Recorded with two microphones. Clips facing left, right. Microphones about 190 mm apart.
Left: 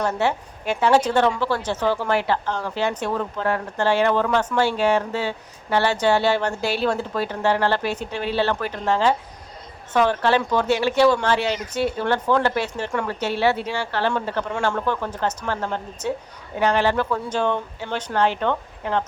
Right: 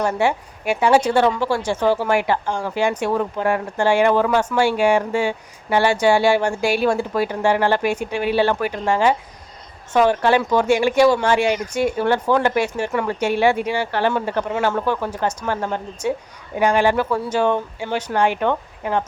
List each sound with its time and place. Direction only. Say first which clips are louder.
0.0 s a woman's voice: right 3 dB; 10° right (ahead or behind)